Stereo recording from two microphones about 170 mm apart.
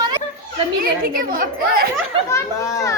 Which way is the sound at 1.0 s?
55° right (ahead or behind).